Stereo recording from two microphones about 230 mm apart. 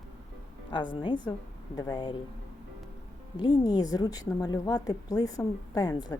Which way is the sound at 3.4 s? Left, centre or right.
Centre.